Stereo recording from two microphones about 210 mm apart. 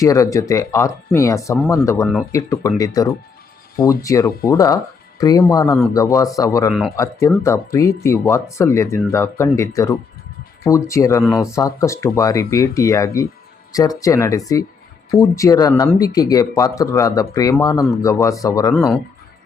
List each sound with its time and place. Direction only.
0.0 s speech: 15° left (ahead or behind)
11.2 s speech: centre (ahead or behind)
11.5 s speech: 15° left (ahead or behind)